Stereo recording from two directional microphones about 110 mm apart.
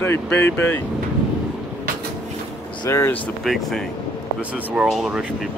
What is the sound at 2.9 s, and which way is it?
Speech, 25° left (ahead or behind).